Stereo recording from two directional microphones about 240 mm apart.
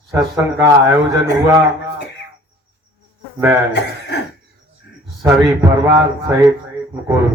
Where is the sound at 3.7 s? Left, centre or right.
Left.